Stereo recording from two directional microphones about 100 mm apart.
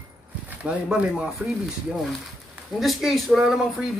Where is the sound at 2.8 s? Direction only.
Centre (ahead or behind).